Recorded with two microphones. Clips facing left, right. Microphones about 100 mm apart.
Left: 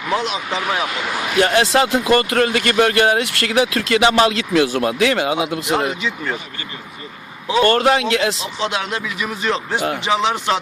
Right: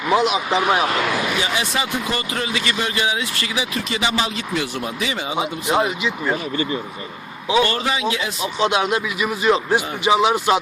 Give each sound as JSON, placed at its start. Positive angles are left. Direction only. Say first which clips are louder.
{"t": 0.1, "sound": "speech", "louder": "right 4 dB", "side_deg": -15}
{"t": 1.4, "sound": "speech", "louder": "left 8 dB", "side_deg": 60}
{"t": 7.6, "sound": "a man's voice", "louder": "left 6 dB", "side_deg": 60}
{"t": 8.6, "sound": "speech", "louder": "right 4 dB", "side_deg": -15}